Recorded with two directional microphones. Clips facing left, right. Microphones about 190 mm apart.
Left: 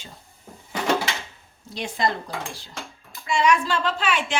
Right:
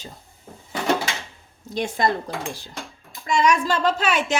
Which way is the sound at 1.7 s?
45° right (ahead or behind).